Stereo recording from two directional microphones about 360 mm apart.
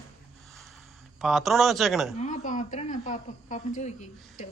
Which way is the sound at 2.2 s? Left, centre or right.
Left.